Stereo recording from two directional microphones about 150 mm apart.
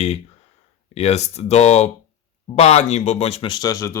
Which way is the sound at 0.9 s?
45° left (ahead or behind).